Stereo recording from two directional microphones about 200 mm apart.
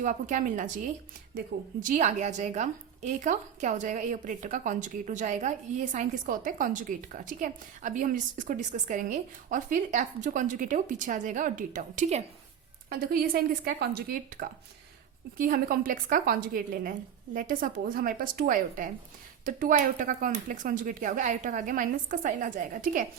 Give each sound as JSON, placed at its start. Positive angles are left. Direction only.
{"t": 0.0, "sound": "a woman's voice", "side_deg": -40}